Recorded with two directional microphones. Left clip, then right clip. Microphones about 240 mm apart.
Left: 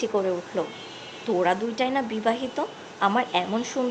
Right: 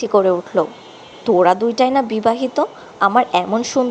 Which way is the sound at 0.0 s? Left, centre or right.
Right.